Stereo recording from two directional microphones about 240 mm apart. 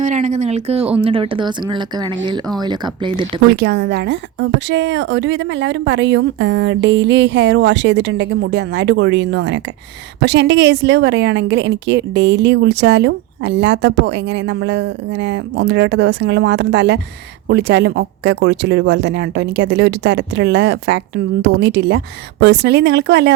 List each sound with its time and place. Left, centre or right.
0.0 s a sound: right
1.0 s speech: right
3.5 s a woman's voice: right